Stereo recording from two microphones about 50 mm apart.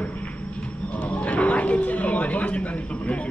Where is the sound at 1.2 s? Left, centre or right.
Left.